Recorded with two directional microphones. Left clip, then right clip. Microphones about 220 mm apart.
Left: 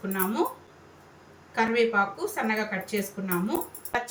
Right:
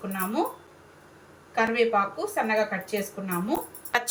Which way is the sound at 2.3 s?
20° right (ahead or behind).